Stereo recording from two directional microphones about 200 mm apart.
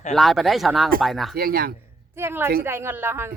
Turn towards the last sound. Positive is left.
turn(degrees=-10)  # may be behind; listen again after turning